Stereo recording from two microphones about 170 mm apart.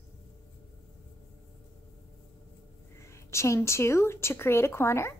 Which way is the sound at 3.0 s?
15° left (ahead or behind).